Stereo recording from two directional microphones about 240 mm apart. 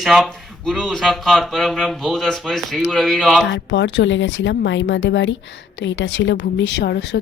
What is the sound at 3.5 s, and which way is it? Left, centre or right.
Speech, left.